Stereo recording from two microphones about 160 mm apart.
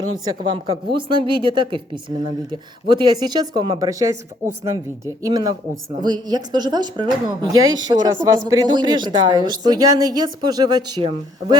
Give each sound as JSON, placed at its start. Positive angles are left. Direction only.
{"t": 0.5, "sound": "a woman's voice", "side_deg": -35}